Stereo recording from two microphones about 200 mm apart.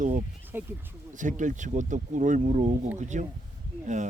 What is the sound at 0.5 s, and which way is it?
Speech, 10° right (ahead or behind).